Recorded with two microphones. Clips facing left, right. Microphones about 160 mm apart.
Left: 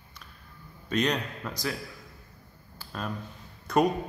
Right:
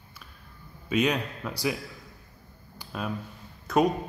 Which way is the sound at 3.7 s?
Centre (ahead or behind).